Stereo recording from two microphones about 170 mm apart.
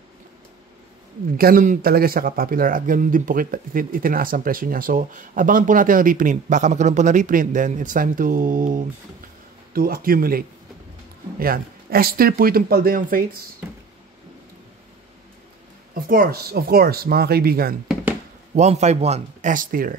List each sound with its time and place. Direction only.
1.3 s speech: 55° right (ahead or behind)
15.9 s speech: 55° right (ahead or behind)
18.5 s speech: 40° right (ahead or behind)